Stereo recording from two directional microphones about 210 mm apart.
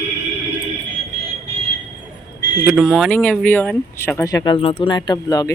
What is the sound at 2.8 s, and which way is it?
Speech, 5° left (ahead or behind).